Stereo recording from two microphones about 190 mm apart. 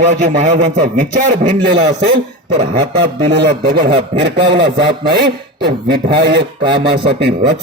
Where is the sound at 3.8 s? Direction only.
60° right (ahead or behind).